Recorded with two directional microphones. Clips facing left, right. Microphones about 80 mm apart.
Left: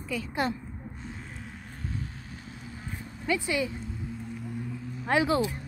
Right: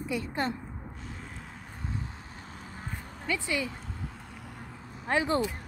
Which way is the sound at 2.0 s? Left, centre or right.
Right.